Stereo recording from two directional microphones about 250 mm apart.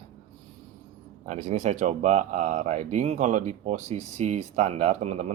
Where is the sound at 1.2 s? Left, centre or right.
Right.